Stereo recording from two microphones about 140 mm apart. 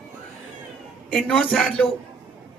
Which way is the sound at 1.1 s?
5° left (ahead or behind).